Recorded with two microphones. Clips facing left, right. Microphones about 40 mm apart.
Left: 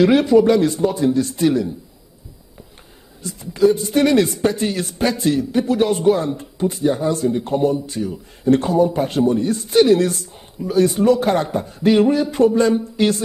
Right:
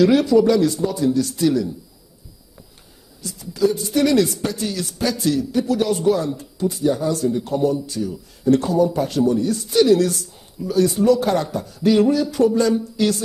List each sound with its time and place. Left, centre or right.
0.0 s a man's voice: left
3.2 s a man's voice: left